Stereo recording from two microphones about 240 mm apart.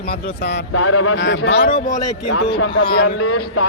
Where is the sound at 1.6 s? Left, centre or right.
Left.